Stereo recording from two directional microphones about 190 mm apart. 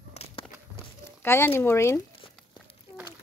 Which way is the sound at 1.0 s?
15° left (ahead or behind).